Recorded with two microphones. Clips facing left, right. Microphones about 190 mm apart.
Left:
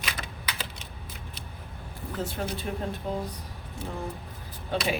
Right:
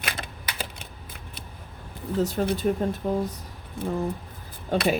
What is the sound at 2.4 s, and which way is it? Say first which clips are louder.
Speech: right 7 dB; 40° right (ahead or behind).